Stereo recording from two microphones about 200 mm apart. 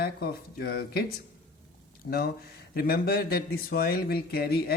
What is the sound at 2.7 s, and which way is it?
Speech, 50° left (ahead or behind).